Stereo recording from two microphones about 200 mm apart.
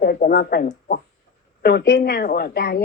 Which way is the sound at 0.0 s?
50° left (ahead or behind).